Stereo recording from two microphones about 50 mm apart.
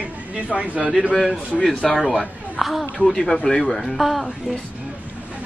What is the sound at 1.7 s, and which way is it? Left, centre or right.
Speech, left.